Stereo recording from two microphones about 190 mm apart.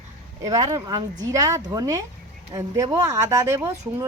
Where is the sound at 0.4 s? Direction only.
15° right (ahead or behind).